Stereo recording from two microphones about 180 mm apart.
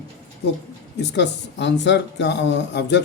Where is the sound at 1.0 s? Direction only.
75° left (ahead or behind).